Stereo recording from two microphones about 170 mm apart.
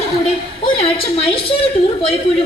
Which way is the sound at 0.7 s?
35° left (ahead or behind).